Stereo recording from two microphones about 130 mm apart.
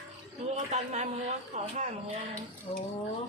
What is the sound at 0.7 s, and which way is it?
Speech, 60° right (ahead or behind).